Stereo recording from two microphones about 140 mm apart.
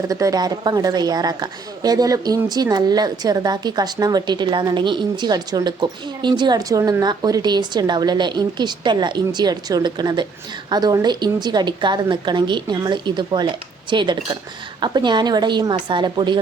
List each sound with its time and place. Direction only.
0.1 s a woman's voice: 25° right (ahead or behind)